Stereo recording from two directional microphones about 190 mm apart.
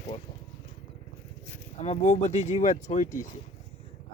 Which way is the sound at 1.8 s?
30° left (ahead or behind).